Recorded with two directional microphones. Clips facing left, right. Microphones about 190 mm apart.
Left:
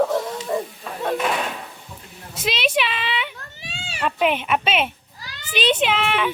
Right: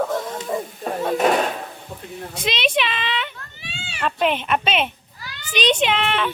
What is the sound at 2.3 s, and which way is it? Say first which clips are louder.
A woman's voice: even; 5° left (ahead or behind).